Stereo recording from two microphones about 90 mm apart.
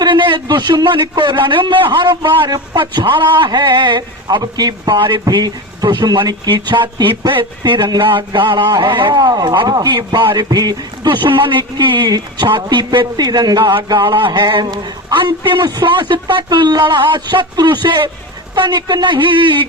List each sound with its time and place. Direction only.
0.0 s a man's voice: 60° right (ahead or behind)
3.1 s a man's voice: 65° right (ahead or behind)
5.2 s a man's voice: 45° right (ahead or behind); by 19.6 s 65° right (ahead or behind)